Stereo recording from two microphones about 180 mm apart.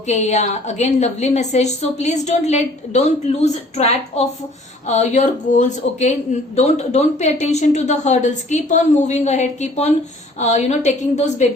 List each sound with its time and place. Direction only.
0.1 s a woman's voice: 40° left (ahead or behind)